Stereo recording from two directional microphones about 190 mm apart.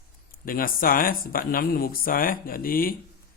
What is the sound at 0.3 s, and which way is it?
A man's voice, 50° left (ahead or behind).